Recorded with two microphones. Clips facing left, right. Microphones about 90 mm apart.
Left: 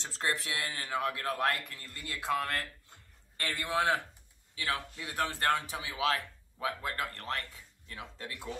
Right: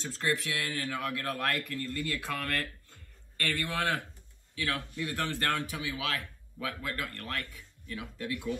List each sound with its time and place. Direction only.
0.0 s speech: 25° left (ahead or behind)